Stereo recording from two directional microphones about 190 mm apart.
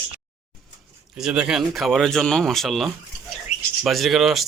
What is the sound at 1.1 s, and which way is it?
Speech, 5° right (ahead or behind).